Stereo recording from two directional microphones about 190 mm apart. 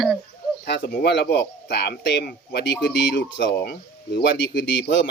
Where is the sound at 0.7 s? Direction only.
55° left (ahead or behind).